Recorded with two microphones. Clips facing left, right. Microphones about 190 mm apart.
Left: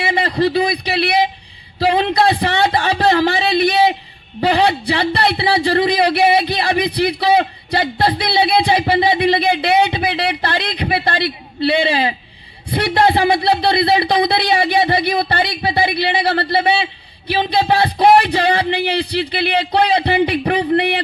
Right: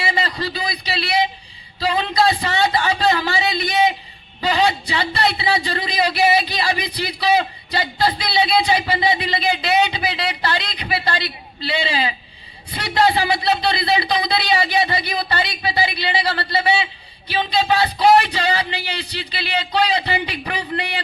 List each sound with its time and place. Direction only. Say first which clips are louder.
0.0 s a man's voice: left 7 dB; 55° left (ahead or behind)
1.8 s a sound: left 4 dB; 60° left (ahead or behind)
12.7 s speech: left 4 dB; 55° left (ahead or behind)